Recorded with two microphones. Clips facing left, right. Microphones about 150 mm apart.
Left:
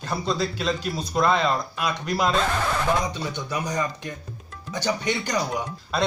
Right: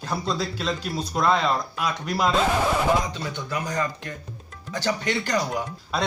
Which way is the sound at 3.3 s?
20° left (ahead or behind).